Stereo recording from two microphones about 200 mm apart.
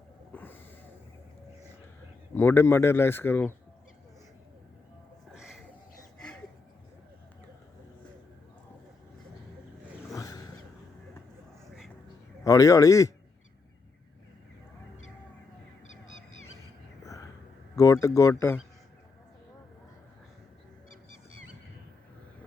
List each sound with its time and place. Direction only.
0.3 s snort: 10° left (ahead or behind)
2.3 s speech: 10° left (ahead or behind)
5.3 s a sound: centre (ahead or behind)
10.1 s wild animals: 15° left (ahead or behind)
12.5 s speech: 15° left (ahead or behind)
17.0 s whispering: 15° left (ahead or behind)
17.7 s speech: 15° left (ahead or behind)